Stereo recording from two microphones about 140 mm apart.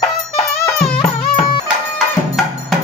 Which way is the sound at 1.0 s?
35° left (ahead or behind).